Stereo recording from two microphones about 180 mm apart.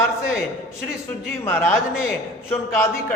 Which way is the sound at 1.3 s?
10° left (ahead or behind).